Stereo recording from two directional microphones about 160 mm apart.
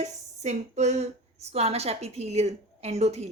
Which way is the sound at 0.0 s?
45° right (ahead or behind).